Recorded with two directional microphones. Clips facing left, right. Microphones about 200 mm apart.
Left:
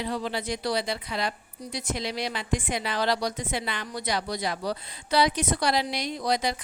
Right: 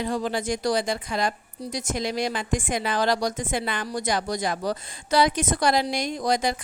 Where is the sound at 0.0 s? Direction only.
45° right (ahead or behind).